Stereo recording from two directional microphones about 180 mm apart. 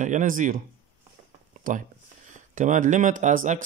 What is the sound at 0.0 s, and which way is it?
Speech, 45° right (ahead or behind).